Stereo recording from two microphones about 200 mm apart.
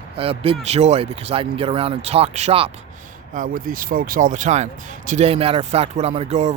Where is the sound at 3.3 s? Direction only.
45° right (ahead or behind).